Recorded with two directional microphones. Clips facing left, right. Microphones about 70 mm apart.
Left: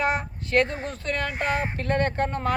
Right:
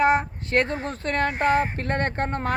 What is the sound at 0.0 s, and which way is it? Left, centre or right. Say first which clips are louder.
Speech: right 6 dB; right.